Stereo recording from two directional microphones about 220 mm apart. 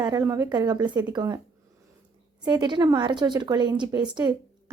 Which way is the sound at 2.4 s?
20° right (ahead or behind).